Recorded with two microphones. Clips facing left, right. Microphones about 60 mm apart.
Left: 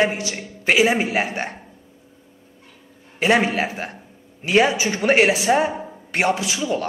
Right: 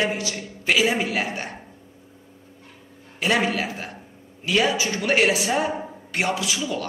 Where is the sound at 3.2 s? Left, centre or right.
Left.